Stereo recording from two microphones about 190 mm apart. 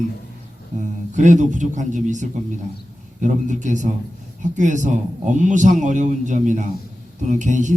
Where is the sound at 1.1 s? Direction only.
40° right (ahead or behind).